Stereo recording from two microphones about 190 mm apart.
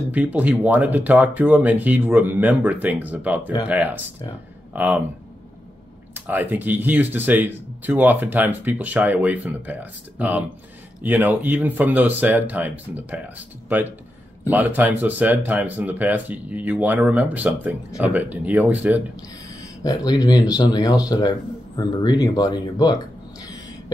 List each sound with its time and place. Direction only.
0.1 s speech: 10° right (ahead or behind)
6.1 s speech: 10° right (ahead or behind)
19.8 s speech: 20° left (ahead or behind)